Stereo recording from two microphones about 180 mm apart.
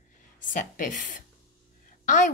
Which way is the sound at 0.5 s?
45° left (ahead or behind).